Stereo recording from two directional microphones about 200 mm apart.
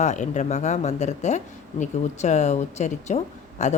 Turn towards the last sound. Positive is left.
turn(degrees=35)  # may be behind; listen again after turning